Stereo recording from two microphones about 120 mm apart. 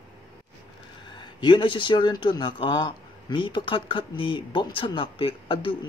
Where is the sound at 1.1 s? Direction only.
40° left (ahead or behind).